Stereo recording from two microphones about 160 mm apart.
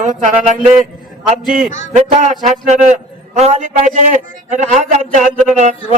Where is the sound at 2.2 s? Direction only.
50° right (ahead or behind).